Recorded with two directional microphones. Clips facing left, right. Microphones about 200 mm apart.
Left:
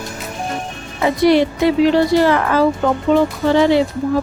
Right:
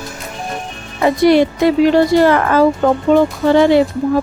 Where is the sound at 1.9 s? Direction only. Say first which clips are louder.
Right 2 dB; 50° right (ahead or behind).